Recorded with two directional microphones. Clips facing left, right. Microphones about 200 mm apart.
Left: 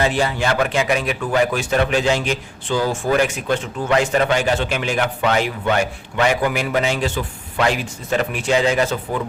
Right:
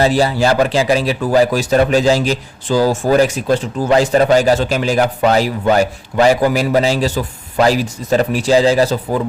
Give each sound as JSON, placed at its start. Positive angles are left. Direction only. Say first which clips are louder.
{"t": 0.0, "sound": "speech", "louder": "right 6 dB", "side_deg": -35}